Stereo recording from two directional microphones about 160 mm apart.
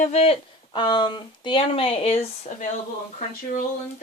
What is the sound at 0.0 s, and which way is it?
Speech, 45° left (ahead or behind).